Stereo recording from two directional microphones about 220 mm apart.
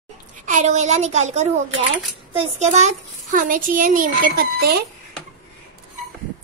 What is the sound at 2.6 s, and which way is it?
A child's voice, 30° right (ahead or behind).